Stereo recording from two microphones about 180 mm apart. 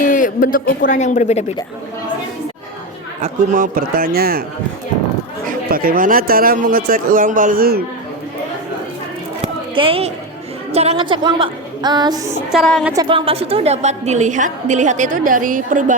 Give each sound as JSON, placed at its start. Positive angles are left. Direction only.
{"t": 0.0, "sound": "speech", "side_deg": 45}
{"t": 3.2, "sound": "speech", "side_deg": -40}
{"t": 5.5, "sound": "speech", "side_deg": -55}
{"t": 9.4, "sound": "a sound", "side_deg": -30}
{"t": 10.7, "sound": "a woman's voice", "side_deg": -35}
{"t": 12.5, "sound": "a woman's voice", "side_deg": 0}
{"t": 12.9, "sound": "a woman's voice", "side_deg": -25}